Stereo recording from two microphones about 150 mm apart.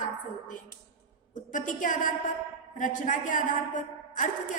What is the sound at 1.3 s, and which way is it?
A woman's voice, 60° left (ahead or behind).